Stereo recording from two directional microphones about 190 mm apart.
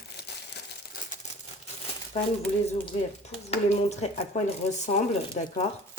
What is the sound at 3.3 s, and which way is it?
Speech, 35° left (ahead or behind).